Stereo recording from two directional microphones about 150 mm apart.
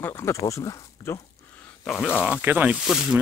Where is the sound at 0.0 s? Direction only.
20° left (ahead or behind).